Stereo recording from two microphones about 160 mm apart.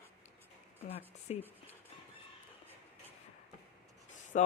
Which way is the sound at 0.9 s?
40° left (ahead or behind).